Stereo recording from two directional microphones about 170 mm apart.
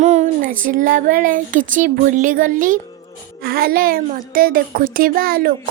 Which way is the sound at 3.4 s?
60° right (ahead or behind).